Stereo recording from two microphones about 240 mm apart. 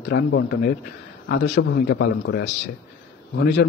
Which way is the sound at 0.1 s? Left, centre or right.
Left.